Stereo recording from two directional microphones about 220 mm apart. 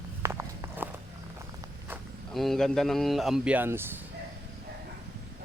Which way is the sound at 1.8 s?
5° right (ahead or behind).